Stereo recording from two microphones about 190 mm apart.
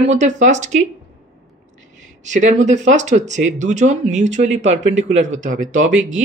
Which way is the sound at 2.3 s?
40° right (ahead or behind).